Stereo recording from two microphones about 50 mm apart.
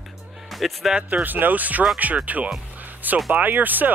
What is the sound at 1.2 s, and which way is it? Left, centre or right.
Speech, right.